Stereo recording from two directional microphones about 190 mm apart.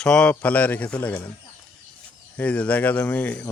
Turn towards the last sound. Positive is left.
turn(degrees=10)  # may be behind; listen again after turning